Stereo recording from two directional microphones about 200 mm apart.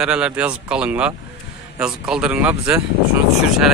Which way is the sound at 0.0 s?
5° right (ahead or behind).